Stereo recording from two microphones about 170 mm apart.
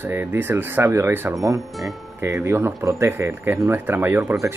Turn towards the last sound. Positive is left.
turn(degrees=-15)  # may be behind; listen again after turning